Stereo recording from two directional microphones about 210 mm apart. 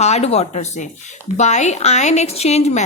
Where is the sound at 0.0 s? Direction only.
30° left (ahead or behind).